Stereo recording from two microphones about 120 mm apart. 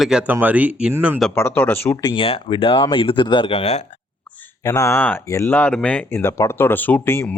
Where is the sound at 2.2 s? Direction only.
50° left (ahead or behind).